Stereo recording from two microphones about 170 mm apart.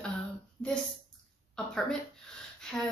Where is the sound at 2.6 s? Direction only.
5° left (ahead or behind).